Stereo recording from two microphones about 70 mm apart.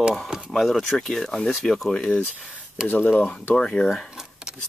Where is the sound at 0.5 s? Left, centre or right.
Centre.